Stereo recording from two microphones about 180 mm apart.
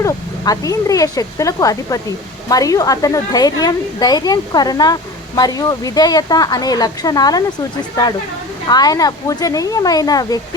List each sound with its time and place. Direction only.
0.0 s speech: 20° left (ahead or behind)
8.6 s speech: 20° left (ahead or behind)